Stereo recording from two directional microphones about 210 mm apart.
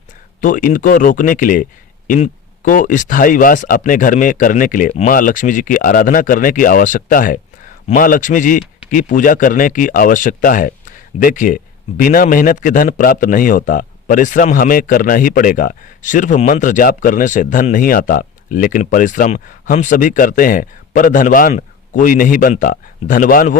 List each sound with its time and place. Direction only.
0.4 s speech: 40° left (ahead or behind)